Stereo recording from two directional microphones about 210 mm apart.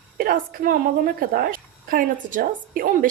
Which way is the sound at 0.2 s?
45° right (ahead or behind).